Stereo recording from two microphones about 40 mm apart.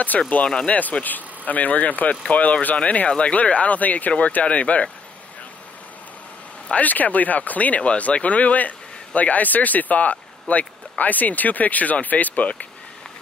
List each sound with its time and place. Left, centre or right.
0.1 s speech: left
0.7 s speech: left
6.7 s speech: left